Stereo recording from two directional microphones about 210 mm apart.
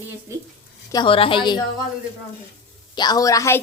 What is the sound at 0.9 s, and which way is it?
Speech, 20° left (ahead or behind).